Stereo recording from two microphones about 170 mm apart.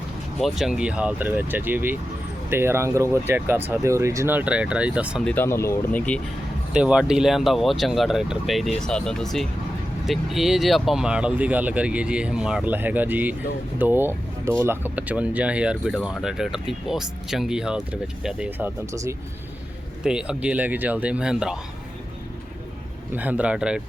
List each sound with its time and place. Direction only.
0.3 s speech: centre (ahead or behind)
5.2 s speech: 10° left (ahead or behind)
6.7 s speech: 5° right (ahead or behind)
20.1 s speech: 5° right (ahead or behind)
23.1 s speech: 10° right (ahead or behind)